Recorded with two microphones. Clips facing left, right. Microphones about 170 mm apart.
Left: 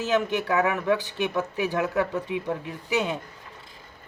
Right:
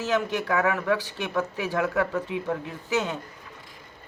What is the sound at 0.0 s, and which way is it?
Speech, 20° left (ahead or behind).